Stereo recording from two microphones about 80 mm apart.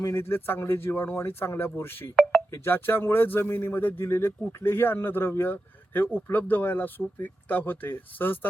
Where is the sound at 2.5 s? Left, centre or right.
Left.